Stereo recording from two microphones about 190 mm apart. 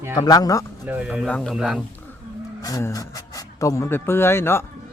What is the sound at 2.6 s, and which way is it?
Speech, 20° left (ahead or behind).